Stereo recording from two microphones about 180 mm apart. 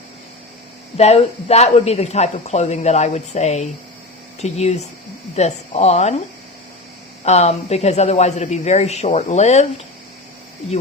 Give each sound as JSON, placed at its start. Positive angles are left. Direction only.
{"t": 0.9, "sound": "speech", "side_deg": 35}
{"t": 7.3, "sound": "speech", "side_deg": 35}